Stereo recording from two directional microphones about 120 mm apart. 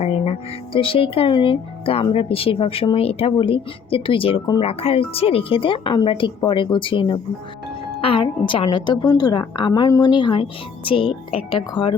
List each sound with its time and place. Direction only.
0.0 s a woman's voice: 60° left (ahead or behind); by 11.9 s 45° left (ahead or behind)